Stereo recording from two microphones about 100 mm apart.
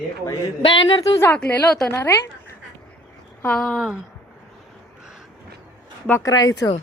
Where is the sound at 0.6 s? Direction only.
60° left (ahead or behind).